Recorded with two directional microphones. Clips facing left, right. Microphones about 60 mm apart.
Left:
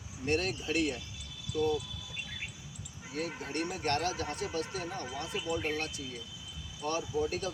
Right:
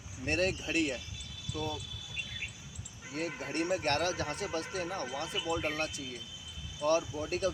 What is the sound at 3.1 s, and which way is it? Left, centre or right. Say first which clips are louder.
Speech: even; right.